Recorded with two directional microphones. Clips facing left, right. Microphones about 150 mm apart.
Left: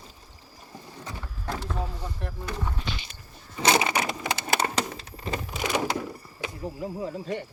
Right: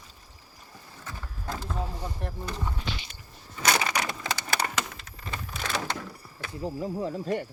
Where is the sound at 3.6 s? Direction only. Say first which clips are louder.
Left 4 dB; 25° left (ahead or behind).